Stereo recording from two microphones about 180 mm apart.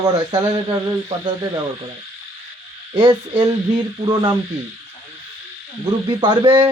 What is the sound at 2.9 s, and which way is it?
Speech, 25° right (ahead or behind).